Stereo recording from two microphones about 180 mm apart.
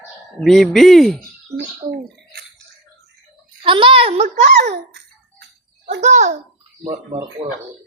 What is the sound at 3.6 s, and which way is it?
Speech, 30° right (ahead or behind).